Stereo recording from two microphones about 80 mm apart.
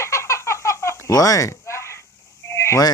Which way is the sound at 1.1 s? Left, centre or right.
Left.